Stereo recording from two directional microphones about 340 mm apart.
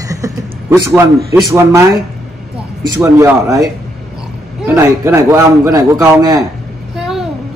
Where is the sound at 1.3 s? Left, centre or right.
Centre.